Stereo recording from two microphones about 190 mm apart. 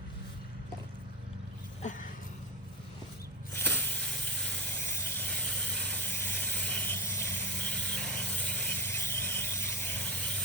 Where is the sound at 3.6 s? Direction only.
10° left (ahead or behind).